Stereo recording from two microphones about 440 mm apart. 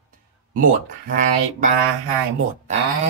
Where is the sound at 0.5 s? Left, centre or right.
Centre.